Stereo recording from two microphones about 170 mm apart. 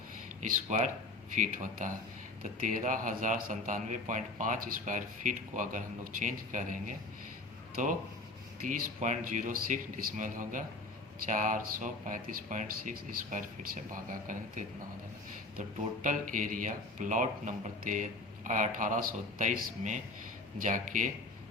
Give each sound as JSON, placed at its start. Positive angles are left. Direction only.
{"t": 0.7, "sound": "speech", "side_deg": -45}